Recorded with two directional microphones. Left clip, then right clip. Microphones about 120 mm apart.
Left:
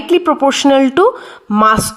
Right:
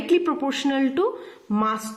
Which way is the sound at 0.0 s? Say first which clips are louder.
Left 10 dB; 45° left (ahead or behind).